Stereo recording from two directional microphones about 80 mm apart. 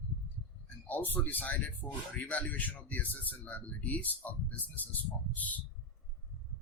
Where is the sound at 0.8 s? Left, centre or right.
Left.